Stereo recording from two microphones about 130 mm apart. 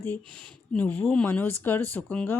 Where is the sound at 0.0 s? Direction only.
10° left (ahead or behind).